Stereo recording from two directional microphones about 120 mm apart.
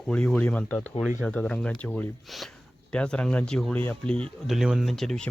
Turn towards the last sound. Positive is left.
turn(degrees=5)  # may be behind; listen again after turning